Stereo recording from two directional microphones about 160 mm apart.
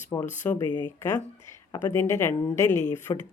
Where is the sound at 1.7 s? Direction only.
15° left (ahead or behind).